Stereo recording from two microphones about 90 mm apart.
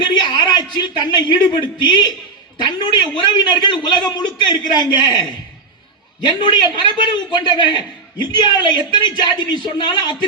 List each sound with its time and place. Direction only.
0.0 s a man's voice: 55° left (ahead or behind)
6.2 s a man's voice: 55° left (ahead or behind)